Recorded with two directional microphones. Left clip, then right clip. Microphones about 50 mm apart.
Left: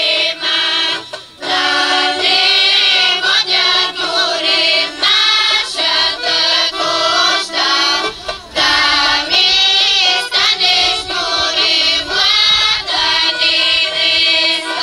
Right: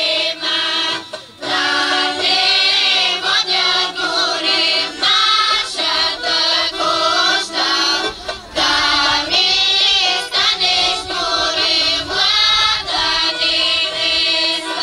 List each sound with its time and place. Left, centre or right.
0.0 s mantra: left
1.5 s choir: left
8.5 s child singing: left